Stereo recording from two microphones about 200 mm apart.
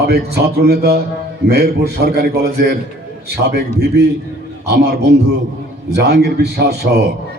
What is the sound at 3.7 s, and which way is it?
A man's voice, 55° right (ahead or behind).